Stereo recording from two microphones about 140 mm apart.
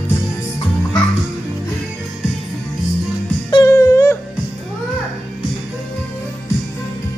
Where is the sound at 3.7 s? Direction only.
20° left (ahead or behind).